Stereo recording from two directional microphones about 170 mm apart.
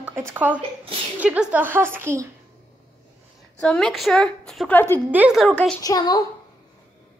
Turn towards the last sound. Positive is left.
turn(degrees=20)  # may be behind; listen again after turning